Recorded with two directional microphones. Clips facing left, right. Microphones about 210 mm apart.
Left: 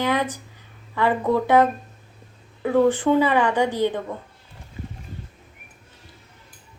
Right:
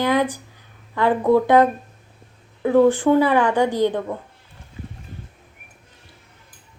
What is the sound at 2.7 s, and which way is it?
A woman's voice, 10° right (ahead or behind).